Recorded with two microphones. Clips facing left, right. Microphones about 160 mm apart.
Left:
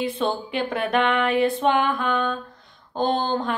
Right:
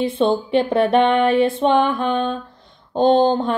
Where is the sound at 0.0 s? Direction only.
30° right (ahead or behind).